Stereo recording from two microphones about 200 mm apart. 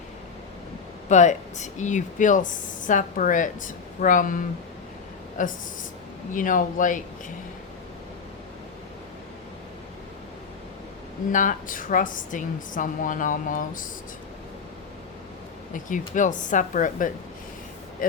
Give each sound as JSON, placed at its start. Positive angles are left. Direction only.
{"t": 1.0, "sound": "speech", "side_deg": 35}
{"t": 5.4, "sound": "speech", "side_deg": 40}
{"t": 11.3, "sound": "speech", "side_deg": 40}
{"t": 15.7, "sound": "speech", "side_deg": 40}